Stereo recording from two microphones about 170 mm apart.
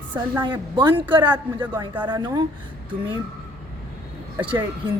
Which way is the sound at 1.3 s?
10° right (ahead or behind).